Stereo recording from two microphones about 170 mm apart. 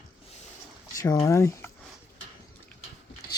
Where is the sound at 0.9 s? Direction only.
20° left (ahead or behind).